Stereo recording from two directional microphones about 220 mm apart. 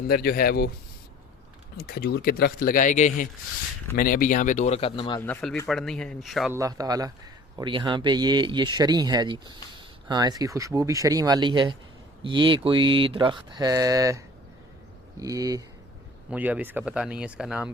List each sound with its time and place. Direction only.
0.1 s speech: 45° left (ahead or behind)
1.8 s speech: 45° left (ahead or behind); by 5.2 s 25° left (ahead or behind)
5.2 s speech: 5° left (ahead or behind)
6.6 s speech: 15° right (ahead or behind)
15.2 s speech: 15° right (ahead or behind)